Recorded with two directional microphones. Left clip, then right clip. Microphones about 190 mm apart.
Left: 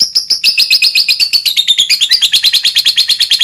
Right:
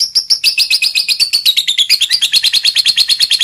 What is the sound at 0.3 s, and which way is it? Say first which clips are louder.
Chirp: left 2 dB; 10° right (ahead or behind).